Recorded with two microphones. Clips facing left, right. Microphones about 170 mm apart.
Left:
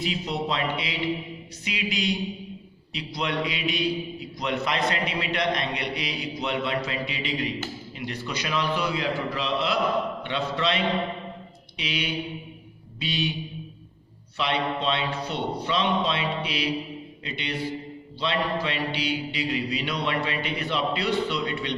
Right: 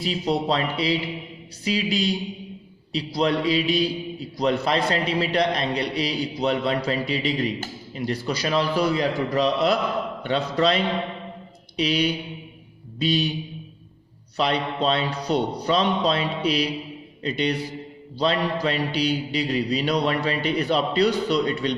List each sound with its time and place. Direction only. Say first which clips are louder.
0.0 s a man's voice: right 5 dB; 35° right (ahead or behind)
14.3 s a man's voice: right 3 dB; 40° right (ahead or behind)